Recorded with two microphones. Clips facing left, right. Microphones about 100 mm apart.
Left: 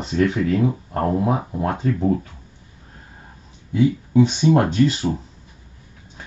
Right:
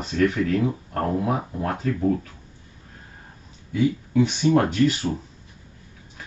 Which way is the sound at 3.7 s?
25° left (ahead or behind).